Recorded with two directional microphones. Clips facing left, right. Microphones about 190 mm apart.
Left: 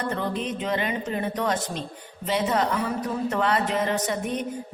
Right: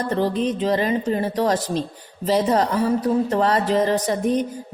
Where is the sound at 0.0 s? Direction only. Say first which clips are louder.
Right 7 dB; 35° right (ahead or behind).